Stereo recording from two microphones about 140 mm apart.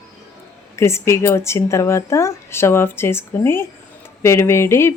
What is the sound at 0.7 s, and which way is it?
A woman's voice, 20° left (ahead or behind).